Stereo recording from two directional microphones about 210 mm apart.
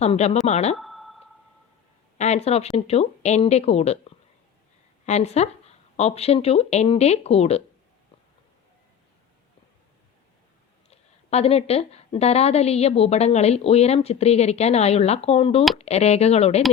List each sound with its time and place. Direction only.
0.0 s speech: 30° left (ahead or behind)
0.8 s a sound: centre (ahead or behind)
2.1 s speech: 30° left (ahead or behind)
5.0 s a woman's voice: 30° left (ahead or behind)
10.8 s a woman's voice: 30° left (ahead or behind)